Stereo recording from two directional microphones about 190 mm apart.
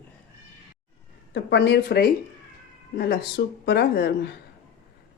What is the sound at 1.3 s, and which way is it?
Speech, 65° left (ahead or behind).